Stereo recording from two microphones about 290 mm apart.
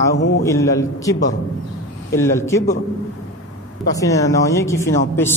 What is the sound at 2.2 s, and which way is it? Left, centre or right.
Speech, centre.